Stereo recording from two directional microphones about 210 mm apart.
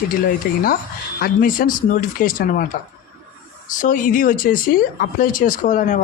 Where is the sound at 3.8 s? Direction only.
40° left (ahead or behind).